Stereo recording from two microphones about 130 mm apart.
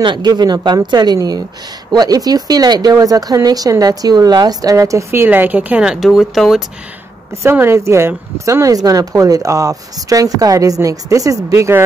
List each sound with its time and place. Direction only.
0.0 s speech: 35° right (ahead or behind); by 6.6 s centre (ahead or behind)
7.4 s speech: 20° right (ahead or behind)